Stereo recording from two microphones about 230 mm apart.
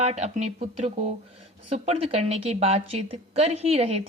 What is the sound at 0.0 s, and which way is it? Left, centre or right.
Speech, right.